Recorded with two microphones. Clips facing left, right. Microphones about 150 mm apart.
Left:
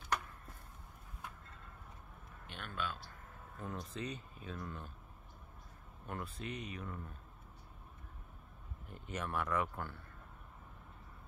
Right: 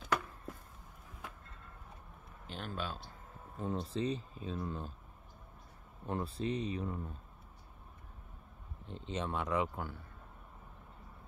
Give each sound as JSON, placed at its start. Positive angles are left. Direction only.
{"t": 2.4, "sound": "speech", "side_deg": -35}
{"t": 3.5, "sound": "speech", "side_deg": -25}
{"t": 6.0, "sound": "speech", "side_deg": -30}
{"t": 8.8, "sound": "speech", "side_deg": -25}